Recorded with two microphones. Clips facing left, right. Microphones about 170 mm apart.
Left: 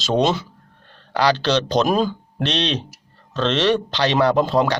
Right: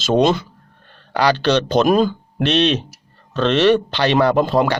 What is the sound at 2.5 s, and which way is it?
Speech, 5° right (ahead or behind).